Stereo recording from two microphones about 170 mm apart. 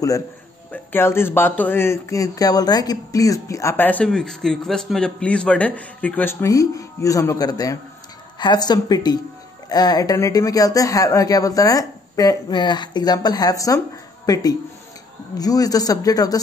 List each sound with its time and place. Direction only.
0.7 s speech: 15° left (ahead or behind)